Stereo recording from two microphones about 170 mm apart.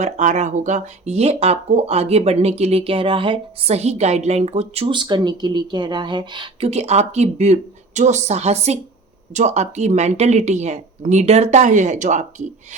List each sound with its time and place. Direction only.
0.0 s speech: 45° right (ahead or behind)